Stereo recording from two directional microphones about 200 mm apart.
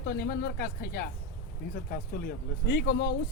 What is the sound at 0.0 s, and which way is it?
Speech, 50° left (ahead or behind).